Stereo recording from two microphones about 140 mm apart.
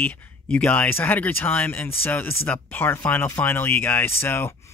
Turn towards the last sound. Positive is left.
turn(degrees=15)  # may be behind; listen again after turning